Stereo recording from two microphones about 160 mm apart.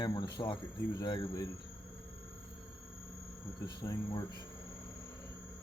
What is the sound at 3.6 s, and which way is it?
Speech, 25° left (ahead or behind).